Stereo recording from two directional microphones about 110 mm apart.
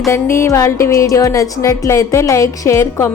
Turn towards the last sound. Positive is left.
turn(degrees=25)  # may be behind; listen again after turning